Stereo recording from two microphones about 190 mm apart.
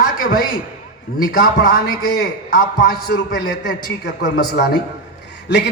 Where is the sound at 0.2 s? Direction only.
50° left (ahead or behind).